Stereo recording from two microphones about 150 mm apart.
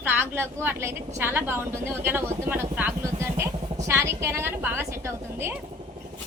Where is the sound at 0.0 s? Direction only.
15° right (ahead or behind).